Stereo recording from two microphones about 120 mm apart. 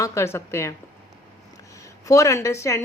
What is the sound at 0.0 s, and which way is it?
Speech, 25° left (ahead or behind).